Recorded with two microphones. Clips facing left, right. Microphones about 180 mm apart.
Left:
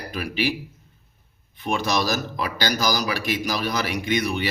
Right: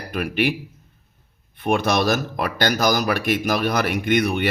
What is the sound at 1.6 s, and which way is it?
Speech, 60° right (ahead or behind).